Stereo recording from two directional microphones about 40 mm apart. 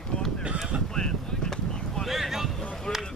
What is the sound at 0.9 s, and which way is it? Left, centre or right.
Boat, centre.